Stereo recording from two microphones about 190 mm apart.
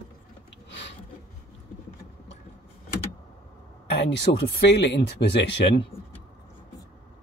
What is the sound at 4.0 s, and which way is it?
Speech, 65° left (ahead or behind).